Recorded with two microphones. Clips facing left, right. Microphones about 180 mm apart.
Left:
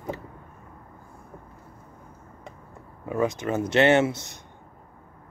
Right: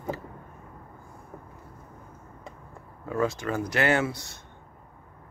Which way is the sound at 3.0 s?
20° left (ahead or behind).